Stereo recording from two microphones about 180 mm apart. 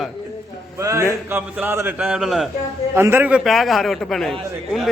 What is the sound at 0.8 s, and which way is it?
A man's voice, 15° right (ahead or behind).